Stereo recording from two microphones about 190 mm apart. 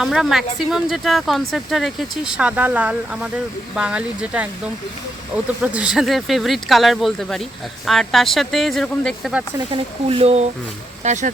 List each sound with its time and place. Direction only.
0.0 s speech: centre (ahead or behind)
5.7 s speech: 5° right (ahead or behind)
9.7 s speech: 30° right (ahead or behind)